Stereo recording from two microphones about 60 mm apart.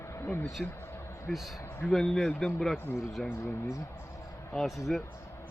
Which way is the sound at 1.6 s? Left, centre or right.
Left.